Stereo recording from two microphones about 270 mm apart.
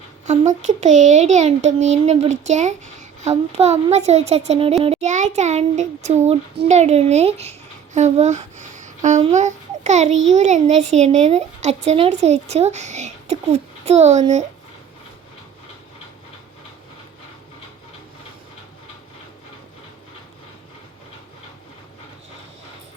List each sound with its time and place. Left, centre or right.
0.3 s a child's voice: right
10.1 s a child's voice: right
10.3 s a child's voice: right